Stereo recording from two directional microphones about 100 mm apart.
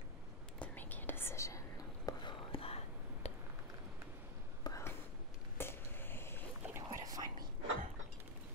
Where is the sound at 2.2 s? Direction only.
70° left (ahead or behind); by 3.3 s 90° left.